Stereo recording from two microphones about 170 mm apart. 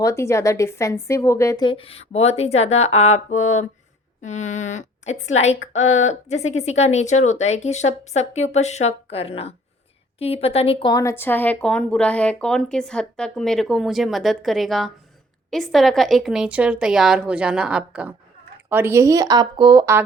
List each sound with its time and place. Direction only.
0.0 s a woman's voice: 20° left (ahead or behind); by 10.9 s 35° left (ahead or behind)
10.9 s speech: 15° left (ahead or behind); by 20.0 s 20° right (ahead or behind)